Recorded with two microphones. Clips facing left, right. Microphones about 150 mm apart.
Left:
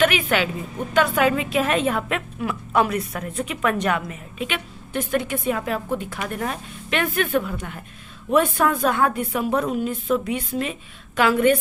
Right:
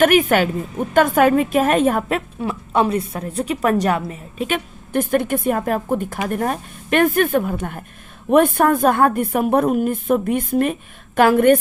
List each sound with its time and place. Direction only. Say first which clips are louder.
0.0 s a woman's voice: right 6 dB; 45° right (ahead or behind)